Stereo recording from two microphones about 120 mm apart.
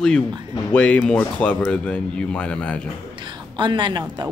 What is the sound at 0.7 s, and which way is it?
Speech, 10° left (ahead or behind).